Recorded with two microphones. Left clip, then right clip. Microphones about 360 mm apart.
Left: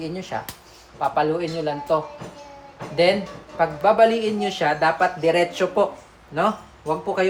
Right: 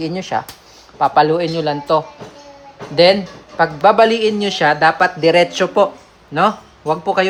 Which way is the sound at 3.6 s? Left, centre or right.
Right.